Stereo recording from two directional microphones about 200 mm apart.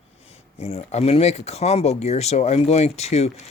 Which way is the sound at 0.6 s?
35° left (ahead or behind).